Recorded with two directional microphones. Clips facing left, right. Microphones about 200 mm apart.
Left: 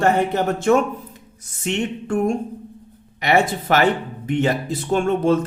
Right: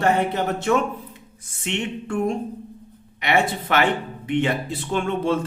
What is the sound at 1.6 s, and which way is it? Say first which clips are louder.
A man's voice: left 4 dB; 45° left (ahead or behind).